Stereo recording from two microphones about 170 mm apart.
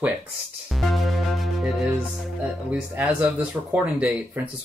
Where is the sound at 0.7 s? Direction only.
Centre (ahead or behind).